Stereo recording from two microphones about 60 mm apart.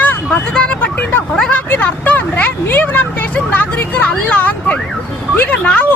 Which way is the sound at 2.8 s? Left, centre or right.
Left.